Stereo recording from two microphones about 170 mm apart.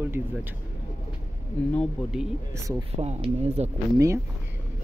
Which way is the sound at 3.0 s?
40° right (ahead or behind).